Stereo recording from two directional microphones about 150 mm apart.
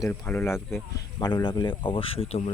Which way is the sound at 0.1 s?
15° left (ahead or behind).